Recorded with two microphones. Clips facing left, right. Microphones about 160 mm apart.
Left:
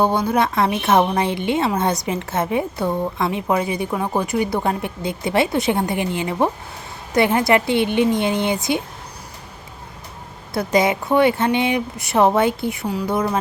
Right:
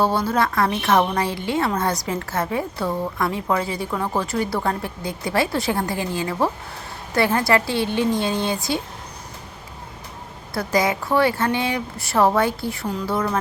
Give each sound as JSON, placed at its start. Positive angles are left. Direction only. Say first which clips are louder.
{"t": 0.0, "sound": "a woman's voice", "louder": "left 2 dB", "side_deg": 20}
{"t": 10.5, "sound": "a woman's voice", "louder": "left 3 dB", "side_deg": 20}